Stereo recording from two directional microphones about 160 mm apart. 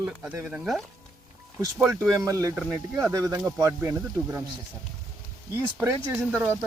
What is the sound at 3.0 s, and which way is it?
Speech, 20° right (ahead or behind).